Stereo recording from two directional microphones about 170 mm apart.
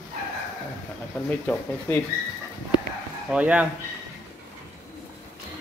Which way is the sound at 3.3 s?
10° right (ahead or behind).